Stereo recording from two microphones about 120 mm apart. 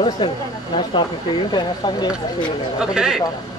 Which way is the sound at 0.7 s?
40° left (ahead or behind).